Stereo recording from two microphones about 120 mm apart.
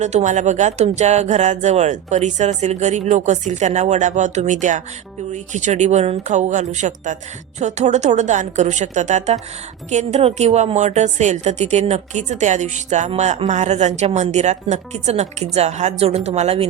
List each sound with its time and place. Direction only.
0.0 s speech: 85° right
7.6 s speech: 75° right (ahead or behind)
13.1 s speech: 65° right (ahead or behind)